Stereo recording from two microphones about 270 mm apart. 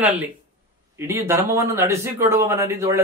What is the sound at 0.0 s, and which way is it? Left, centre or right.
Speech, centre.